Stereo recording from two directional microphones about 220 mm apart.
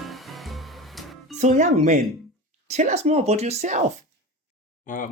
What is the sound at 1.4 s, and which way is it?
A woman's voice, 30° right (ahead or behind).